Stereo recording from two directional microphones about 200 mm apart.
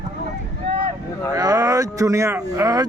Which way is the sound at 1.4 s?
20° right (ahead or behind).